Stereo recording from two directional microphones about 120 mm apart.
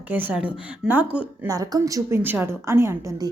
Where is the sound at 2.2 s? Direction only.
15° right (ahead or behind).